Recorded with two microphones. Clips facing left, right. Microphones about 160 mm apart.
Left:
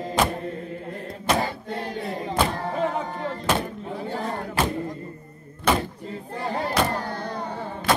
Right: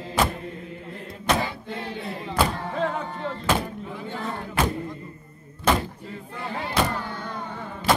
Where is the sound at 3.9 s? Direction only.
40° left (ahead or behind).